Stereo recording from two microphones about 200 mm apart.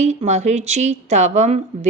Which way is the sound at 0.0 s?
35° right (ahead or behind).